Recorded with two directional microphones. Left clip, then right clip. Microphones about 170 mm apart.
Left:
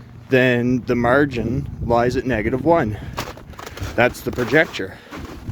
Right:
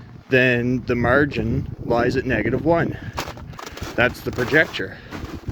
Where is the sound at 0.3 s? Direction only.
30° left (ahead or behind).